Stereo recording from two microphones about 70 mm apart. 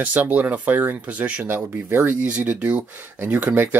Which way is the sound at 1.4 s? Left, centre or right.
Right.